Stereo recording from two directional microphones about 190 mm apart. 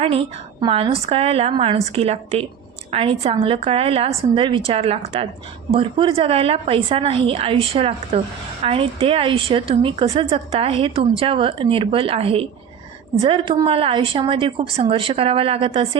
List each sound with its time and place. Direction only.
0.0 s a woman's voice: 30° right (ahead or behind)